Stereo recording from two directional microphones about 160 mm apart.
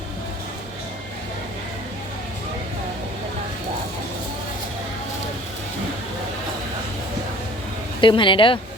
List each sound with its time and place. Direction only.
8.0 s speech: 30° left (ahead or behind)